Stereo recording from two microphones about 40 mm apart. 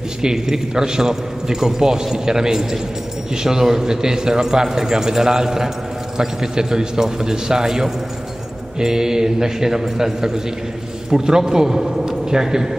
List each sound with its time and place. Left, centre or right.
0.2 s a man's voice: centre